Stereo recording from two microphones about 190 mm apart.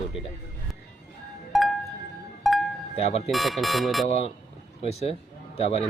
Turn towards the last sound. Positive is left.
turn(degrees=30)  # may be behind; listen again after turning